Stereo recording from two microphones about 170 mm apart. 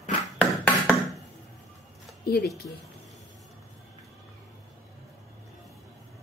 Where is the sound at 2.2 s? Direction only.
70° left (ahead or behind).